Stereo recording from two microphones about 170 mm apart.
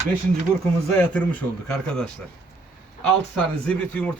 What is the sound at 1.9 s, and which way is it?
Speech, 5° left (ahead or behind).